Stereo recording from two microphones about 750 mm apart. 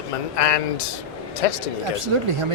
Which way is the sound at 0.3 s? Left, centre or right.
Left.